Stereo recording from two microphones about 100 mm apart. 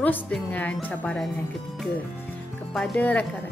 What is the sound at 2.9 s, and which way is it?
Speech, 15° left (ahead or behind).